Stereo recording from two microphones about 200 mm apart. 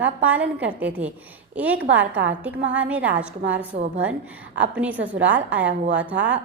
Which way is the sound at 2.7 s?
5° right (ahead or behind).